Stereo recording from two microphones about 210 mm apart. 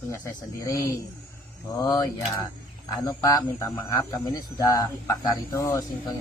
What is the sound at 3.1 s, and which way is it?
Speech, 15° left (ahead or behind).